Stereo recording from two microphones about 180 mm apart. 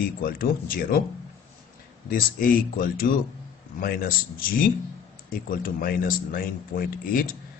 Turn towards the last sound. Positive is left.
turn(degrees=50)  # may be behind; listen again after turning